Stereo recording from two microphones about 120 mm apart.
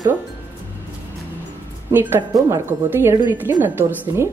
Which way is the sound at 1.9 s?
20° right (ahead or behind).